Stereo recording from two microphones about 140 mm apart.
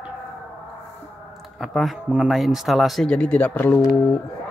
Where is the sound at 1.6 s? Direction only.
Centre (ahead or behind).